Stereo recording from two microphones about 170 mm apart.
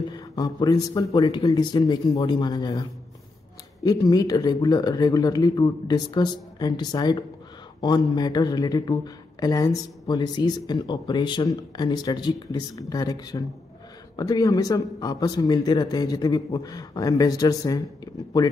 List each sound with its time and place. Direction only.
0.1 s speech: 20° left (ahead or behind)